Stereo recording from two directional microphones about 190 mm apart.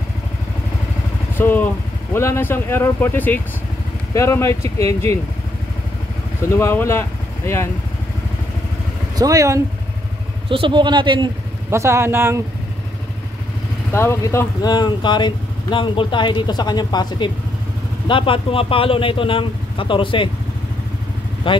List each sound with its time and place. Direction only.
1.4 s speech: 10° left (ahead or behind)
6.5 s speech: 15° left (ahead or behind)
9.1 s a man's voice: 20° right (ahead or behind)
13.9 s speech: 15° left (ahead or behind)
21.5 s speech: 25° left (ahead or behind)